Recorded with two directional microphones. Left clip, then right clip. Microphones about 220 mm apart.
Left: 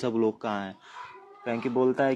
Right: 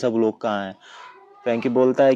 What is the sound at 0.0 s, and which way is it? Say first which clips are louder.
A man's voice: right 6 dB; 35° right (ahead or behind).